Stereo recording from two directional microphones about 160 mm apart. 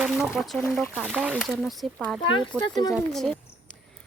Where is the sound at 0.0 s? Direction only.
5° right (ahead or behind).